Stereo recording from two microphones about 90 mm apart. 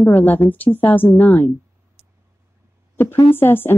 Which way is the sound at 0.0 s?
20° left (ahead or behind).